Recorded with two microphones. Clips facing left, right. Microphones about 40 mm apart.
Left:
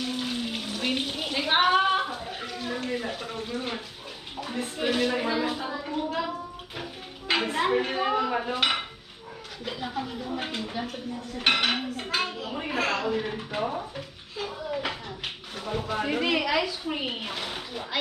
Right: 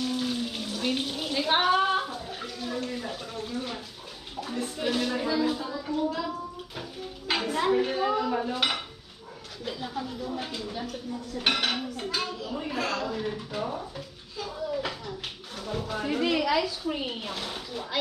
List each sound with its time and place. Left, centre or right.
0.0 s bathtub: left
4.4 s speech: left
7.3 s a woman's voice: left
9.7 s speech: left
13.9 s a sound: left
15.8 s speech: left